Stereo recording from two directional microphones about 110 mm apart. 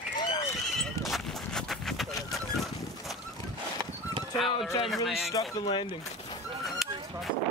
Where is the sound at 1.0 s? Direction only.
Centre (ahead or behind).